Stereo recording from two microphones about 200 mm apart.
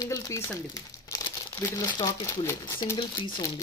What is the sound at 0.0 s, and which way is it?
Speech, 20° left (ahead or behind).